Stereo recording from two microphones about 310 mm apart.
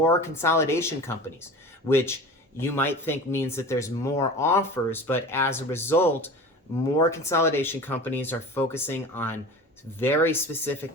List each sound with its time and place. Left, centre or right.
0.0 s speech: centre